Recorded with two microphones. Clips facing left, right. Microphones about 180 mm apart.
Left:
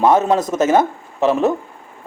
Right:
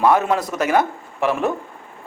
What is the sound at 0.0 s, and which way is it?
A man's voice, 20° left (ahead or behind).